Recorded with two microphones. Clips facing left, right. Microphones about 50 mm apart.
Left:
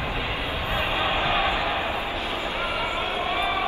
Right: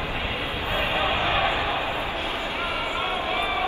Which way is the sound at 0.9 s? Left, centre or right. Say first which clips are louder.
Even; right.